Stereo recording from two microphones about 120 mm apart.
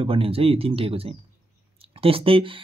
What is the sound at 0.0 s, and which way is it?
Speech, 50° right (ahead or behind).